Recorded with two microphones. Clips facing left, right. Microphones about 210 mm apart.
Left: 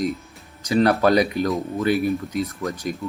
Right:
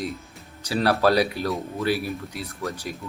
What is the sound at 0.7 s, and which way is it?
Speech, 5° right (ahead or behind).